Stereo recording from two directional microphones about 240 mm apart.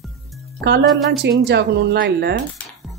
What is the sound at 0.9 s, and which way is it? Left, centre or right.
Speech, centre.